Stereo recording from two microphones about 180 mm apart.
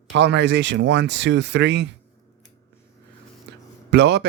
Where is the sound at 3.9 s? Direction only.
70° right (ahead or behind).